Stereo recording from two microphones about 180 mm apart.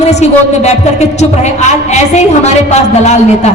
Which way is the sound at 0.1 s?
40° left (ahead or behind).